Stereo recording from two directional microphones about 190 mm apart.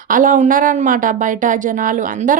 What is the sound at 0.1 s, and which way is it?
Speech, 45° right (ahead or behind).